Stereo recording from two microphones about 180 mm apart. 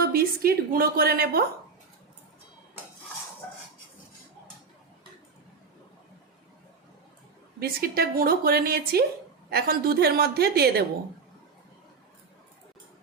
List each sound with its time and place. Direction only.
0.0 s a woman's voice: 55° right (ahead or behind)
7.6 s a woman's voice: 55° right (ahead or behind)